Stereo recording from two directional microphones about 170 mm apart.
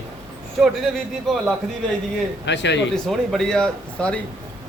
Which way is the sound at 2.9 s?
Centre (ahead or behind).